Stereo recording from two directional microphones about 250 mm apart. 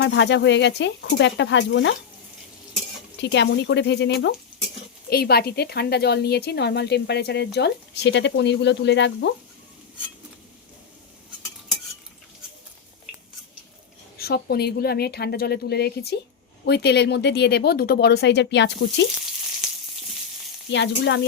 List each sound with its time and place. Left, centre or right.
0.0 s speech: left
3.2 s a woman's voice: left
14.2 s a woman's voice: left
20.7 s speech: left